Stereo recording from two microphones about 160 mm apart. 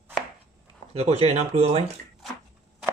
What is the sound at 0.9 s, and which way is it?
Speech, 40° right (ahead or behind).